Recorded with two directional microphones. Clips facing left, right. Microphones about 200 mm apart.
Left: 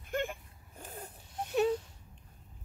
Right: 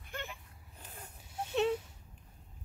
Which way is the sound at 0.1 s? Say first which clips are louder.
Left 10 dB; 50° left (ahead or behind).